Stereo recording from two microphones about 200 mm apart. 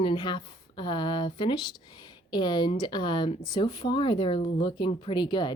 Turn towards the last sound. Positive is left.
turn(degrees=20)  # may be behind; listen again after turning